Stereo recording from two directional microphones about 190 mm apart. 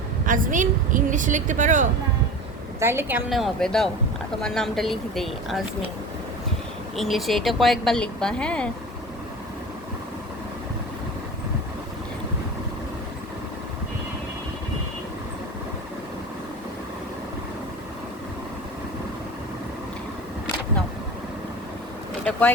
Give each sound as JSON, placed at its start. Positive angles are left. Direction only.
{"t": 0.3, "sound": "a woman's voice", "side_deg": -45}
{"t": 2.8, "sound": "speech", "side_deg": -10}
{"t": 6.9, "sound": "speech", "side_deg": 0}
{"t": 22.2, "sound": "vehicle", "side_deg": 5}